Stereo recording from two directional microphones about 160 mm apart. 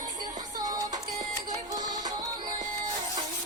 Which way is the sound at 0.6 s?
25° right (ahead or behind).